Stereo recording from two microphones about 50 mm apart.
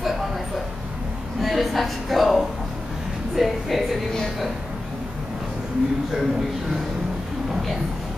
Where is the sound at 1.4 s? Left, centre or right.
Centre.